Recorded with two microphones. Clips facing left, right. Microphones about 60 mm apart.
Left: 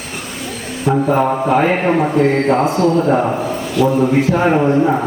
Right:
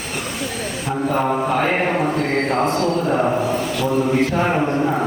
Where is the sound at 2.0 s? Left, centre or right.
Left.